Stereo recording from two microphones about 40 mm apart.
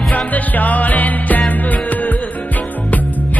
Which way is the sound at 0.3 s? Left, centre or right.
Left.